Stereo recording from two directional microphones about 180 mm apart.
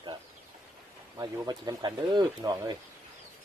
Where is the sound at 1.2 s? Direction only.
20° right (ahead or behind).